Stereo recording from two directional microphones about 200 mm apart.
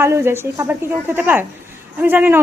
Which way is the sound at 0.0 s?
10° right (ahead or behind).